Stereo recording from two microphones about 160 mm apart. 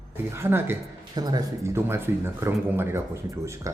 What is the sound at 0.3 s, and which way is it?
Speech, 15° right (ahead or behind).